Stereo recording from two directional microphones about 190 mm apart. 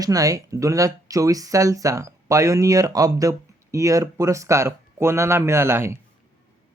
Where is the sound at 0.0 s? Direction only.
20° right (ahead or behind).